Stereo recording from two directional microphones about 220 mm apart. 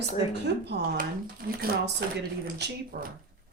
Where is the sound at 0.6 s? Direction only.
45° right (ahead or behind).